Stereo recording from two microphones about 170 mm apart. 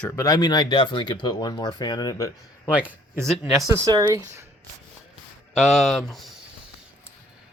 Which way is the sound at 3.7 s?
20° right (ahead or behind).